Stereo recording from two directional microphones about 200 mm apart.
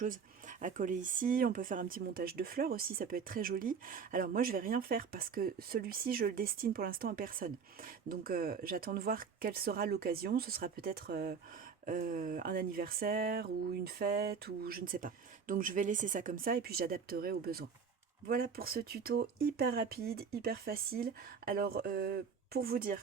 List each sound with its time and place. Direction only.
0.0 s speech: 40° right (ahead or behind)